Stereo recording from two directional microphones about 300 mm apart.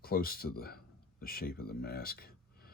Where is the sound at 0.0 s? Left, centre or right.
Left.